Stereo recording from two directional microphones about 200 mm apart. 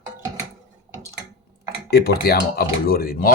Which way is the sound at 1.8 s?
50° left (ahead or behind).